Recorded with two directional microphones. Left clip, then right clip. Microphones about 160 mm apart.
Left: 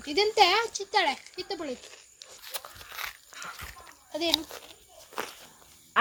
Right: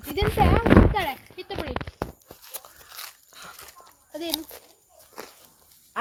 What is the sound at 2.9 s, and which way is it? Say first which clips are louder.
Dog: left 4 dB; 30° right (ahead or behind).